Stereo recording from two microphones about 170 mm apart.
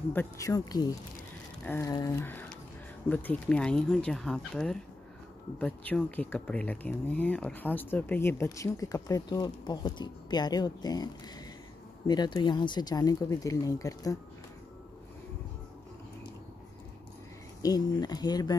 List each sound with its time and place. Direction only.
0.1 s speech: 15° left (ahead or behind)
12.1 s speech: 25° left (ahead or behind)
17.6 s speech: 20° left (ahead or behind)